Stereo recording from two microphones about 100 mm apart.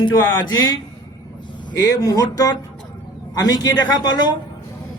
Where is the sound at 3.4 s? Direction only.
40° left (ahead or behind).